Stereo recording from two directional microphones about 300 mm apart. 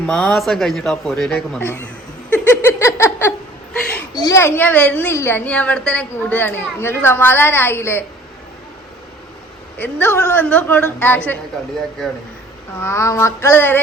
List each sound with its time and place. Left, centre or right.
0.0 s speech: centre
2.3 s a sound: centre
4.2 s a woman's voice: centre
9.7 s a woman's voice: centre
12.8 s a woman's voice: centre